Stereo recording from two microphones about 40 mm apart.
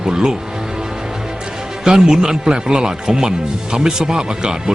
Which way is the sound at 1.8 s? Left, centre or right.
Centre.